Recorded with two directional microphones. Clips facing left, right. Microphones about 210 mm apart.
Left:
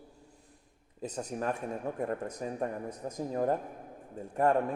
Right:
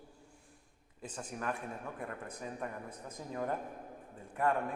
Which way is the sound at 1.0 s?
40° left (ahead or behind).